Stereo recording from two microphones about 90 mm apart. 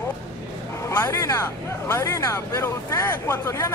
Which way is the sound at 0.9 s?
25° left (ahead or behind).